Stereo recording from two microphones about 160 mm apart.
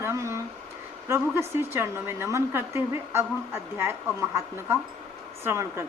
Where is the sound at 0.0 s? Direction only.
20° right (ahead or behind).